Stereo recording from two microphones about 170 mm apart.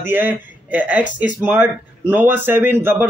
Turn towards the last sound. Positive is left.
turn(degrees=-10)  # may be behind; listen again after turning